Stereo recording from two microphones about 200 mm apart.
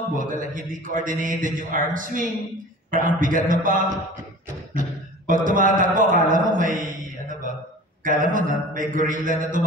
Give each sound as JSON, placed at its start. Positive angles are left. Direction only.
{"t": 0.1, "sound": "a man's voice", "side_deg": -40}
{"t": 8.0, "sound": "a man's voice", "side_deg": -40}